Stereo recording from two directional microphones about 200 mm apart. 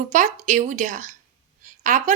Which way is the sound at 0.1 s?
40° right (ahead or behind).